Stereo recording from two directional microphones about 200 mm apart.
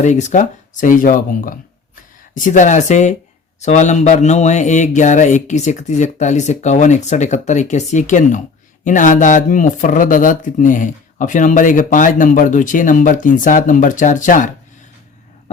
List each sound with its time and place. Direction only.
0.0 s speech: 35° left (ahead or behind)